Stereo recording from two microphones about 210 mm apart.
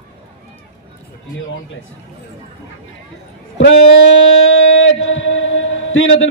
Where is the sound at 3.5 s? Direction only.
65° left (ahead or behind).